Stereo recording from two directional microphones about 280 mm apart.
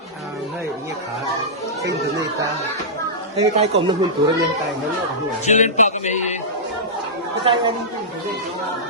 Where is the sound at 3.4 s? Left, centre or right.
Right.